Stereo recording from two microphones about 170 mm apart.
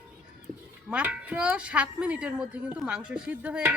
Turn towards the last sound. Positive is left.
turn(degrees=-5)  # may be behind; listen again after turning